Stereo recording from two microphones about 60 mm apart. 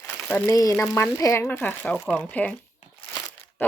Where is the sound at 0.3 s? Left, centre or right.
Left.